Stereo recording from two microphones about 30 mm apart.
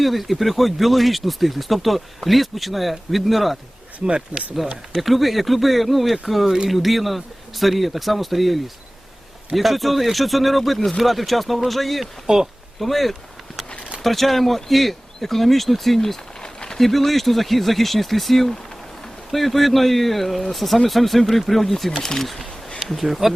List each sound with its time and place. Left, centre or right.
0.0 s speech: centre
4.0 s speech: right
4.9 s speech: centre
12.2 s speech: centre
12.8 s speech: centre
16.4 s a sound: left
16.7 s speech: centre
22.3 s a sound: centre
23.0 s speech: centre